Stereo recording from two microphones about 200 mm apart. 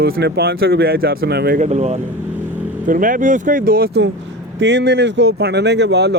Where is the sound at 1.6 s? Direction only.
35° right (ahead or behind).